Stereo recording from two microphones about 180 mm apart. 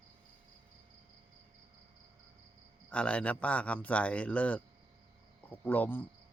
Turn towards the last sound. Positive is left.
turn(degrees=10)  # may be behind; listen again after turning